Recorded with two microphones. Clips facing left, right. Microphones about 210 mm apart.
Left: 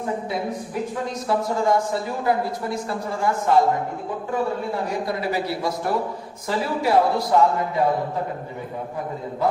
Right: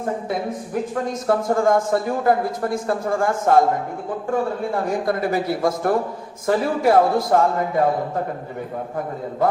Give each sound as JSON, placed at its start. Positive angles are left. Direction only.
{"t": 1.0, "sound": "a man's voice", "side_deg": -50}